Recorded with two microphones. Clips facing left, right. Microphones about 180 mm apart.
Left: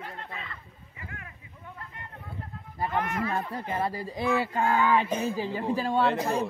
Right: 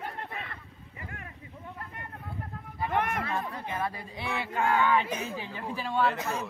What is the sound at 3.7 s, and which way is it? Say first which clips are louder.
Speech: left 6 dB; 35° left (ahead or behind).